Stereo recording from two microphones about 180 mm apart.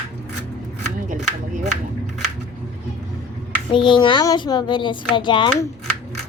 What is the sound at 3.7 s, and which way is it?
Speech, 25° left (ahead or behind).